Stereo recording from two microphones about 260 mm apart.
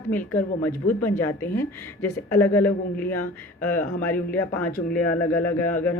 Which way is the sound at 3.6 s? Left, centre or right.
Centre.